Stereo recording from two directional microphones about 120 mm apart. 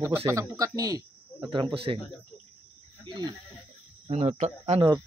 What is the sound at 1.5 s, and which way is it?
Speech, 45° right (ahead or behind).